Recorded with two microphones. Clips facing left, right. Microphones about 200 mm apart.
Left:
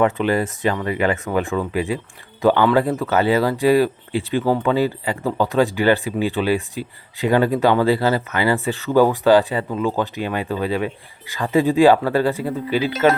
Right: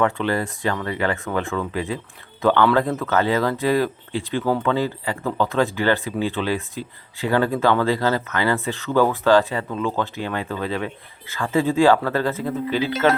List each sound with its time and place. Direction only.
0.0 s speech: 15° left (ahead or behind)